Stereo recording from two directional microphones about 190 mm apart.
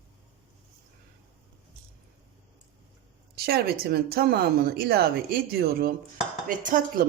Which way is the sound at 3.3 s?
55° right (ahead or behind).